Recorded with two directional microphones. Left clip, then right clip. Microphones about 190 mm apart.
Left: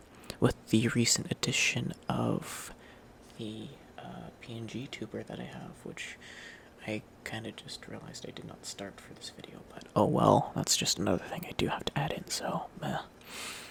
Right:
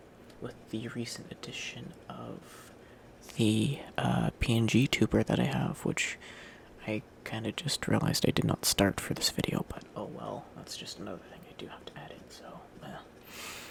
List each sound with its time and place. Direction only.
0.4 s speech: 30° left (ahead or behind)
3.3 s speech: 30° right (ahead or behind)
6.2 s a sound: 10° right (ahead or behind)
7.5 s speech: 30° right (ahead or behind)
9.9 s speech: 30° left (ahead or behind)